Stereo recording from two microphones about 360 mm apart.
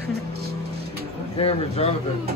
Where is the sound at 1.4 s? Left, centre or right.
Centre.